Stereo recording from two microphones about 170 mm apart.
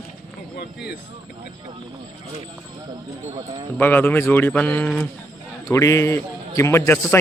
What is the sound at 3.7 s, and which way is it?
A man's voice, 10° left (ahead or behind).